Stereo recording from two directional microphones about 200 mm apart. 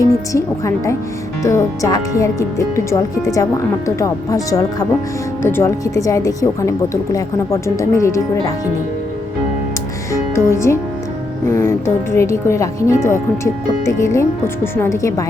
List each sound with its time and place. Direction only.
0.0 s a woman's voice: 15° left (ahead or behind)
10.1 s music: 15° left (ahead or behind)
11.4 s a woman's voice: 10° left (ahead or behind)